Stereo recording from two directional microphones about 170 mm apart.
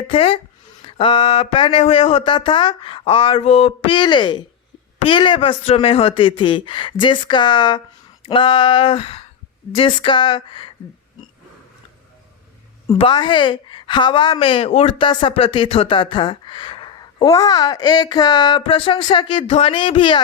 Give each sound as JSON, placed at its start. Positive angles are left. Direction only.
{"t": 0.1, "sound": "a woman's voice", "side_deg": 35}
{"t": 13.0, "sound": "a woman's voice", "side_deg": 30}